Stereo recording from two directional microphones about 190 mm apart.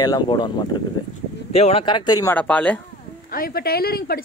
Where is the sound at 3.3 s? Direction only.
50° left (ahead or behind).